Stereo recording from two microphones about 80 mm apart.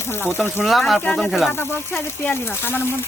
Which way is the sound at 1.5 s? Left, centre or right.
Left.